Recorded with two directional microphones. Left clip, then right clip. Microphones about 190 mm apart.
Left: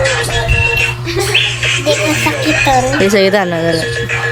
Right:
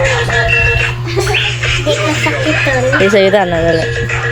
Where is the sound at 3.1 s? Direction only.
15° left (ahead or behind).